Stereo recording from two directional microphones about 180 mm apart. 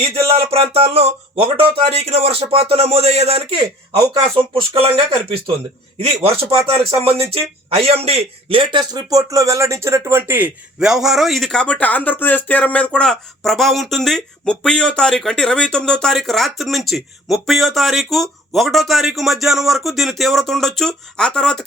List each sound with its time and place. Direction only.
0.3 s a man's voice: 35° right (ahead or behind); by 21.6 s 5° left (ahead or behind)